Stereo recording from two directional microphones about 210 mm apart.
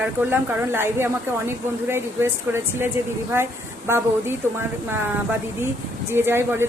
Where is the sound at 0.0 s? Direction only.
10° right (ahead or behind).